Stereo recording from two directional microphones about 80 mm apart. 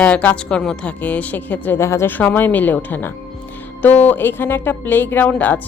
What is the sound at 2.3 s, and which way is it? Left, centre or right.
Speech, left.